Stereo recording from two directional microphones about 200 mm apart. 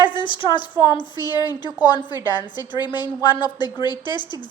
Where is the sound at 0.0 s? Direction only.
25° left (ahead or behind).